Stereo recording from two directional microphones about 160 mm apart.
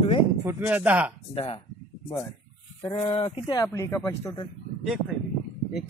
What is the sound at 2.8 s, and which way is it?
Speech, 30° left (ahead or behind).